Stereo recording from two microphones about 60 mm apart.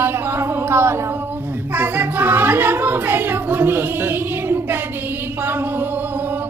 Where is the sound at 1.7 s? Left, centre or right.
Right.